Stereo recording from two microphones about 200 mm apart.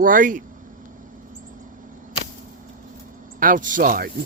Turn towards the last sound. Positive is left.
turn(degrees=-45)  # may be behind; listen again after turning